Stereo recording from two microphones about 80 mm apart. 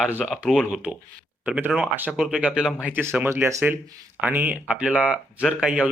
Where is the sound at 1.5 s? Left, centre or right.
Centre.